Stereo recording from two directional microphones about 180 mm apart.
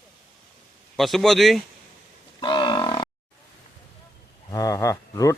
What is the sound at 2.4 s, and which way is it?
Grunt, 25° left (ahead or behind).